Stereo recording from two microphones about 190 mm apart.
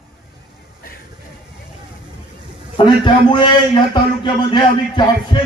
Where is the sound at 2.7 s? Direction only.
25° left (ahead or behind).